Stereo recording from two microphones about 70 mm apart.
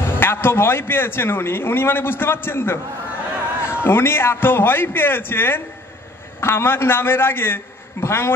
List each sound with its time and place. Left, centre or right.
0.0 s a man's voice: left